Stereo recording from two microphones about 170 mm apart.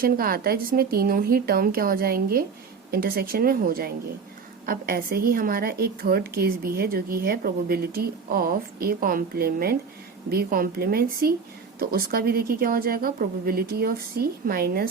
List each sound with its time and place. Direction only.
0.0 s a woman's voice: 60° right (ahead or behind)